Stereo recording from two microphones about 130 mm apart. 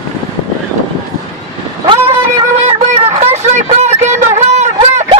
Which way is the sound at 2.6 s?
50° right (ahead or behind).